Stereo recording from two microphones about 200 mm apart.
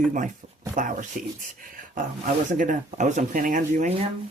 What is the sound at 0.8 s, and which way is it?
Speech, 40° right (ahead or behind).